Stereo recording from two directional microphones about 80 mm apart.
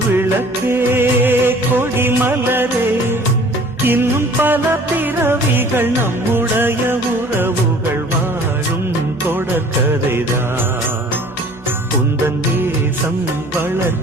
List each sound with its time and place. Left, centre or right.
0.3 s music: right
3.8 s music: right